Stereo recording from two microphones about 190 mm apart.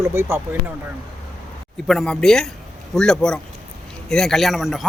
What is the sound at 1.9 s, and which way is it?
A man's voice, centre (ahead or behind).